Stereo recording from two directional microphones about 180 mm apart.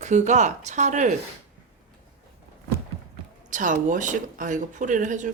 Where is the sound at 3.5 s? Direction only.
45° right (ahead or behind).